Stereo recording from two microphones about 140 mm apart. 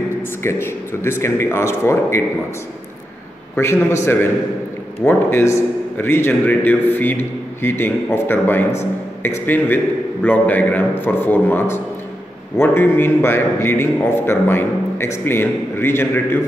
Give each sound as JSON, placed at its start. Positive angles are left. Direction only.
{"t": 0.4, "sound": "speech", "side_deg": 20}
{"t": 3.5, "sound": "a man's voice", "side_deg": 20}